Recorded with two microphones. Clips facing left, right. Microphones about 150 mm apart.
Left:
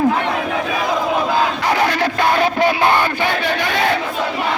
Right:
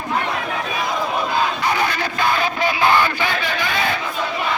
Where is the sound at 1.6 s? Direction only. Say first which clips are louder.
Left 4 dB; 90° left.